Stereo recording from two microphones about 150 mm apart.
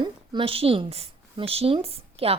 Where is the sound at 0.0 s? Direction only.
35° right (ahead or behind).